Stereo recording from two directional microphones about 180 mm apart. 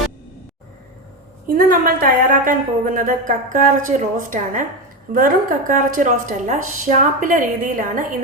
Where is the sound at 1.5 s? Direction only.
55° right (ahead or behind).